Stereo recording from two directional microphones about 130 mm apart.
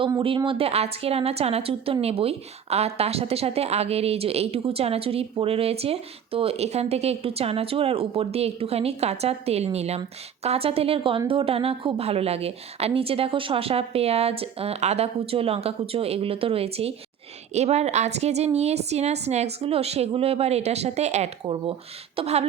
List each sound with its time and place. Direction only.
0.2 s a woman's voice: 40° right (ahead or behind); by 21.2 s 60° right (ahead or behind)
21.4 s a woman's voice: 40° right (ahead or behind)